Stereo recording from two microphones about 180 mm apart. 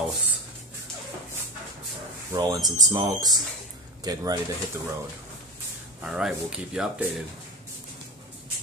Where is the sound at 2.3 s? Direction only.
20° right (ahead or behind).